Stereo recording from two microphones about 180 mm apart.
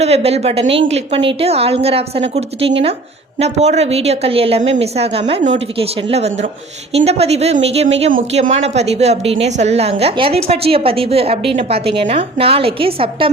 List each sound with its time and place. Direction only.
0.0 s speech: 35° right (ahead or behind)